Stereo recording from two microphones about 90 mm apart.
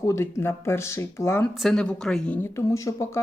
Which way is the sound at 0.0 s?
35° left (ahead or behind).